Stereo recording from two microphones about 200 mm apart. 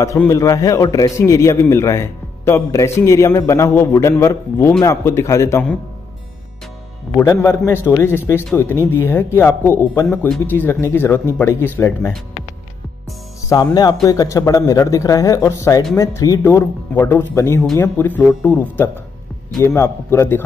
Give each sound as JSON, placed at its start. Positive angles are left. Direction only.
{"t": 0.0, "sound": "a man's voice", "side_deg": 15}
{"t": 7.2, "sound": "a man's voice", "side_deg": 15}
{"t": 13.5, "sound": "a man's voice", "side_deg": 20}